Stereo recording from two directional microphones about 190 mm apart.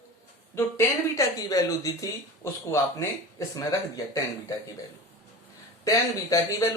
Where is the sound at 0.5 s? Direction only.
15° left (ahead or behind).